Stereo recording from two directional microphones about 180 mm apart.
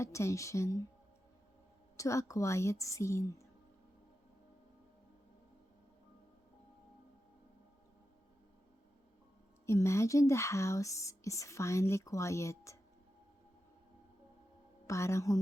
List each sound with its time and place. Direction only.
0.0 s speech: 15° left (ahead or behind)
2.0 s speech: 15° left (ahead or behind)
9.6 s speech: 15° left (ahead or behind)
14.8 s speech: 15° left (ahead or behind)